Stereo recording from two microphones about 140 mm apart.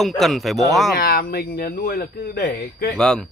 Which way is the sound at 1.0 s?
90° left.